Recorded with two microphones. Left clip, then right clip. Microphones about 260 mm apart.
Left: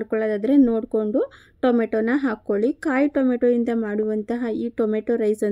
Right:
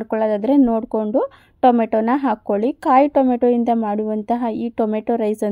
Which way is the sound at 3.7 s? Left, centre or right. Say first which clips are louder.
Right 6 dB; right.